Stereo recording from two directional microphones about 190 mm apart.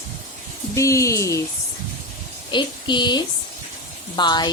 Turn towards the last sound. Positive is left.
turn(degrees=20)  # may be behind; listen again after turning